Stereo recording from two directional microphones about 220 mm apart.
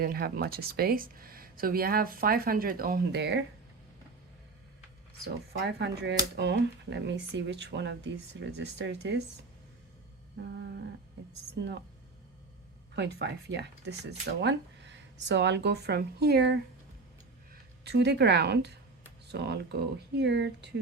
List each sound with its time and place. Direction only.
0.0 s speech: 45° right (ahead or behind)
5.5 s speech: 50° right (ahead or behind)
10.3 s speech: 50° right (ahead or behind)
13.0 s speech: 50° right (ahead or behind)